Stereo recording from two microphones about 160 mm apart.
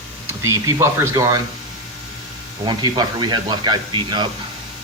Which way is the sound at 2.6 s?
25° right (ahead or behind).